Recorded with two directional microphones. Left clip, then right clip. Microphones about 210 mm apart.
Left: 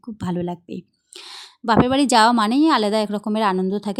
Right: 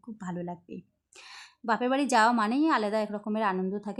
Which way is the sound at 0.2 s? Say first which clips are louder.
Left 11 dB; 40° left (ahead or behind).